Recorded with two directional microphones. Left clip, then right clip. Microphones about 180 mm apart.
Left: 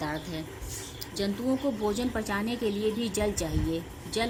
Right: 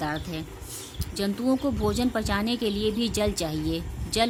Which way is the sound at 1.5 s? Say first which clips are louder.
Right 3 dB; 45° right (ahead or behind).